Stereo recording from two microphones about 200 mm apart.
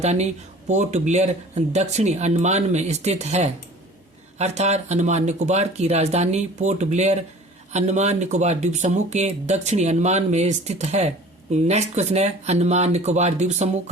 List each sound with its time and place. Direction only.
0.0 s speech: 35° right (ahead or behind)